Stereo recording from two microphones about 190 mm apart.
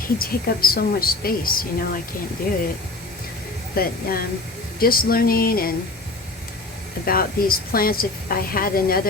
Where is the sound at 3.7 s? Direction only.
50° left (ahead or behind).